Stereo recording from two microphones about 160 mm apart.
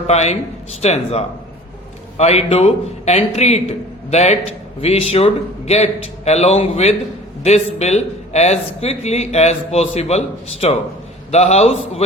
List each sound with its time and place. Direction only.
0.1 s a man's voice: 45° left (ahead or behind)